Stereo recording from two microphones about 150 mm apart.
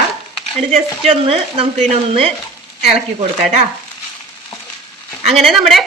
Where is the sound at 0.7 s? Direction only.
45° right (ahead or behind).